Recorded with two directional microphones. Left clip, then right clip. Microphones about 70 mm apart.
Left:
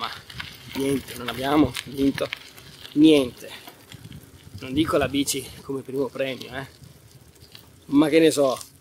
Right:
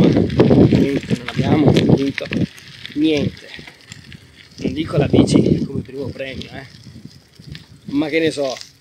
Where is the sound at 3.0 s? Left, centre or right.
Left.